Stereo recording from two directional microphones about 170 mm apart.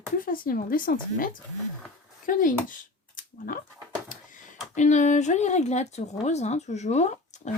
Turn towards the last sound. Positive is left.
turn(degrees=45)  # may be behind; listen again after turning